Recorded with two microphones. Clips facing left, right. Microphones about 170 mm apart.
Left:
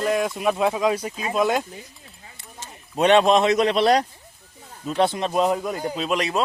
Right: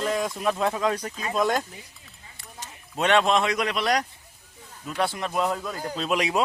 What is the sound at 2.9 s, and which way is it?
Speech, 20° left (ahead or behind).